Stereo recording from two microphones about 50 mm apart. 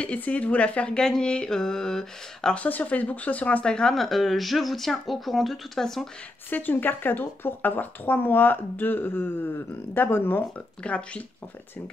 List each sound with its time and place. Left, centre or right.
0.0 s speech: left; by 2.5 s centre
2.5 s speech: left
3.6 s speech: centre
3.9 s speech: centre
6.5 s speech: left
10.8 s speech: left